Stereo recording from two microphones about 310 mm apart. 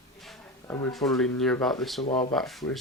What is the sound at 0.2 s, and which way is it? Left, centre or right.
Speech, centre.